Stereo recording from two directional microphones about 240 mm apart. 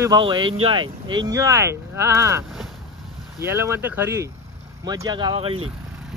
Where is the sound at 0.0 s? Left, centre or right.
Centre.